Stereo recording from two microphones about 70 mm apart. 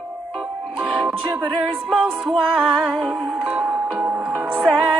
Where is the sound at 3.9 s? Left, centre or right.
Right.